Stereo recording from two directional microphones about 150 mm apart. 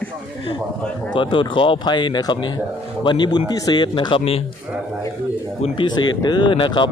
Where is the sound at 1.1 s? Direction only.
35° left (ahead or behind).